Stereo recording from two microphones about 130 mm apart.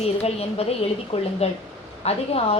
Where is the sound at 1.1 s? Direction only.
50° left (ahead or behind).